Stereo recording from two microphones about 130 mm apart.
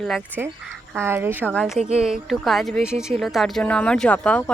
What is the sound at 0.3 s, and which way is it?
Speech, 15° right (ahead or behind).